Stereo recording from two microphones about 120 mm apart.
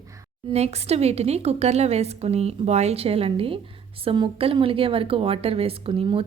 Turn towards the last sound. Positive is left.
turn(degrees=-50)  # may be behind; listen again after turning